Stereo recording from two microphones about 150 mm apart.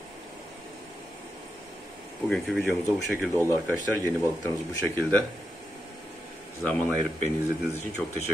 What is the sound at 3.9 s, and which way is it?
Speech, 15° left (ahead or behind).